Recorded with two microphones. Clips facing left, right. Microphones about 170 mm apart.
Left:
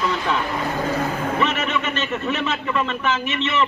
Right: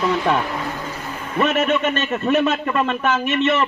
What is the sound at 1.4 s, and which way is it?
A man's voice, 45° right (ahead or behind).